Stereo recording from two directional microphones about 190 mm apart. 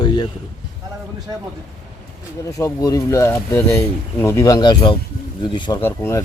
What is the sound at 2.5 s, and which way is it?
A man's voice, 15° left (ahead or behind).